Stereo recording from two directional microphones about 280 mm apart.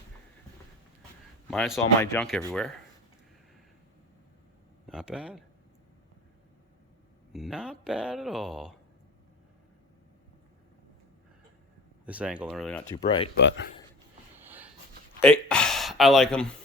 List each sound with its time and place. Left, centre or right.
1.5 s speech: centre
4.9 s speech: centre
7.3 s speech: centre
12.0 s speech: centre
13.0 s speech: centre
13.3 s speech: left
15.2 s speech: centre